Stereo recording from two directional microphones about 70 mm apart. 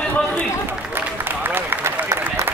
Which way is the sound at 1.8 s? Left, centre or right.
Right.